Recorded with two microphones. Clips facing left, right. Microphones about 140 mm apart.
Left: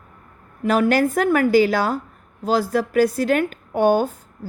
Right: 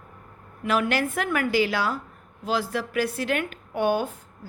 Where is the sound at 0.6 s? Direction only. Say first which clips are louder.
Left 7 dB; 40° left (ahead or behind).